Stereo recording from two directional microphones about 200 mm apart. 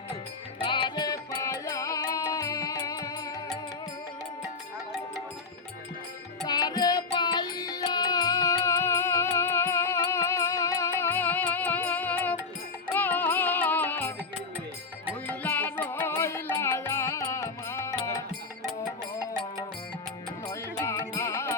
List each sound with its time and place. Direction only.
0.6 s music: 25° left (ahead or behind)
6.5 s music: 20° left (ahead or behind)
15.3 s music: 10° left (ahead or behind)
18.6 s music: 5° right (ahead or behind)
20.5 s music: 15° left (ahead or behind)